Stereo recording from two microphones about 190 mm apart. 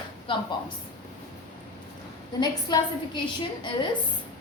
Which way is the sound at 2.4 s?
20° left (ahead or behind).